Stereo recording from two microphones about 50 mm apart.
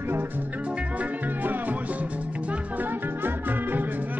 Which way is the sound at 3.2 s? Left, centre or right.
Right.